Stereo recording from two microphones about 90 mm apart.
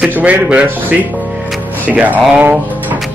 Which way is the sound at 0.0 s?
15° right (ahead or behind).